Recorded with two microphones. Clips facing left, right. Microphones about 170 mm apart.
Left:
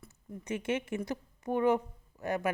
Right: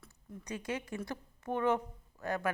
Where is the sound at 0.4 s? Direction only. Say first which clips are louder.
Left 6 dB; 25° left (ahead or behind).